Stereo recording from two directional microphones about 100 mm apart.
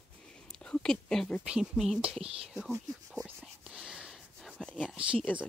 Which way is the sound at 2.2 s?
75° right (ahead or behind).